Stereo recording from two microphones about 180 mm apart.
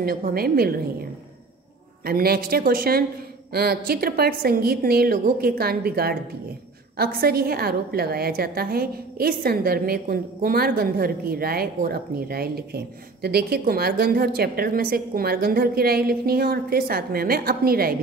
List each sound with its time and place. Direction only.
0.0 s a woman's voice: 55° right (ahead or behind)
2.0 s a woman's voice: 55° right (ahead or behind)